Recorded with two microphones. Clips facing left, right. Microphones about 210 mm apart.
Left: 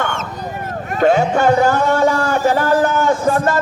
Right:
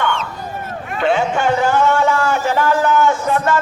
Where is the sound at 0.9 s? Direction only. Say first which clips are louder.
Left 3 dB; 40° left (ahead or behind).